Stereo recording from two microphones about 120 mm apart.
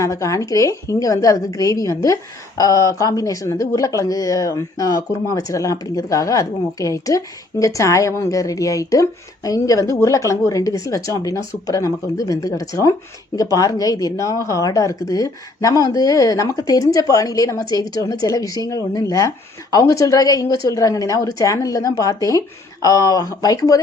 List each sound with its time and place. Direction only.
0.0 s speech: 25° left (ahead or behind)